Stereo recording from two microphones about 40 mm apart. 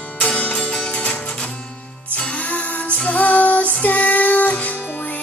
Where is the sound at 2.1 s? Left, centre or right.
Left.